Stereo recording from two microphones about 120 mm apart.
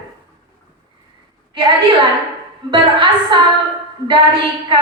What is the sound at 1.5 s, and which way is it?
A woman's voice, 45° right (ahead or behind).